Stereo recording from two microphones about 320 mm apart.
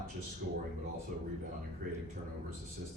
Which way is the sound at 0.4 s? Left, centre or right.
Right.